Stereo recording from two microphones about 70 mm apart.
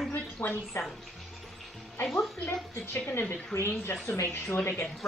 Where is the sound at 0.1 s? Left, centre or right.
Left.